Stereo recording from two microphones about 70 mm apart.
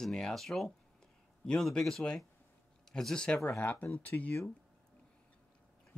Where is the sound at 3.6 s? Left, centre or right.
Left.